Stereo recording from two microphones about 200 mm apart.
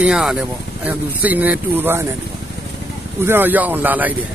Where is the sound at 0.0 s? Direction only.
5° right (ahead or behind).